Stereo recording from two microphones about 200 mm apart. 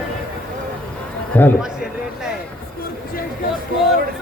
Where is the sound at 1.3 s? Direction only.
10° left (ahead or behind).